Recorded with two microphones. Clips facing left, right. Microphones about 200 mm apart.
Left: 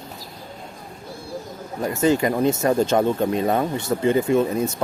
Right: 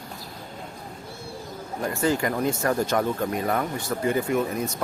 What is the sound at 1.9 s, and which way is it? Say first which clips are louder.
Speech: left 5 dB; 20° left (ahead or behind).